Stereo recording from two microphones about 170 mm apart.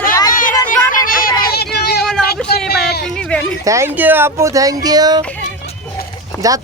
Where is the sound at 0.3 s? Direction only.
55° left (ahead or behind); by 3.0 s 70° left (ahead or behind).